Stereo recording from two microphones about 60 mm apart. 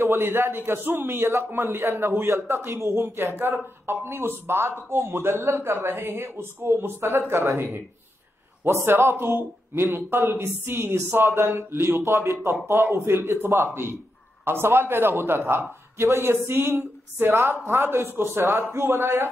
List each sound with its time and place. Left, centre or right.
0.0 s speech: right
12.6 s a man's voice: right